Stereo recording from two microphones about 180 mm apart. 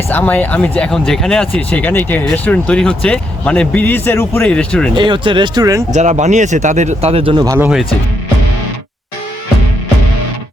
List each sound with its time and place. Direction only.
0.1 s speech: 10° left (ahead or behind)
4.9 s speech: 25° right (ahead or behind)
5.9 s speech: 40° right (ahead or behind)
7.4 s speech: 15° right (ahead or behind)